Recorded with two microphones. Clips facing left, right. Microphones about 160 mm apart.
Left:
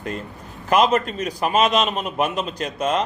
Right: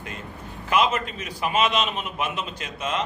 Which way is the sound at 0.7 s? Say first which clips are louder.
Left 5 dB; 40° left (ahead or behind).